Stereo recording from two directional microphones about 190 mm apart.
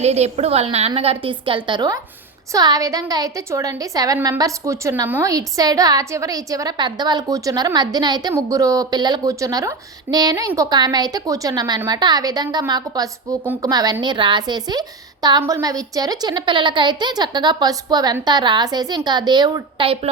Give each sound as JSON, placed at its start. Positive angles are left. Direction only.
{"t": 0.0, "sound": "a woman's voice", "side_deg": -35}